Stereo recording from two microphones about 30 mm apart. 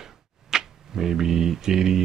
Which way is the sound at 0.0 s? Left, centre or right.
Centre.